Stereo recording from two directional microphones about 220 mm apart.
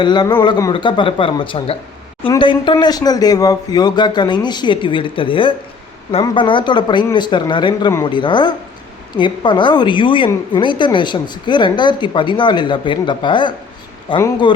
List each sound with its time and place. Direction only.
0.0 s a woman's voice: 20° left (ahead or behind)